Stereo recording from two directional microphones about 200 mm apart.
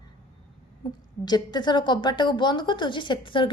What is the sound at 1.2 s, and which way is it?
A woman's voice, 20° left (ahead or behind).